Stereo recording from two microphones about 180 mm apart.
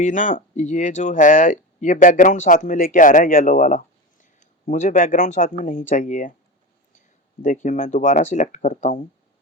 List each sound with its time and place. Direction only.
0.0 s speech: 45° left (ahead or behind)
7.4 s speech: 45° left (ahead or behind)